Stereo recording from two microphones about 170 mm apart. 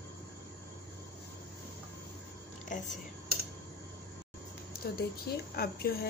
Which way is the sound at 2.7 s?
50° left (ahead or behind).